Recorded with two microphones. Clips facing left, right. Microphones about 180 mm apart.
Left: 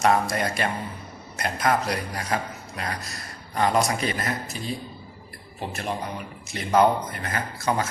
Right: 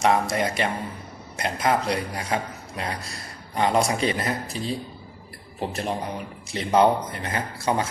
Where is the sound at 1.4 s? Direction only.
25° right (ahead or behind).